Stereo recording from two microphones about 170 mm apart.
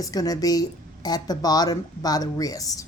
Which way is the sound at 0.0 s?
20° left (ahead or behind).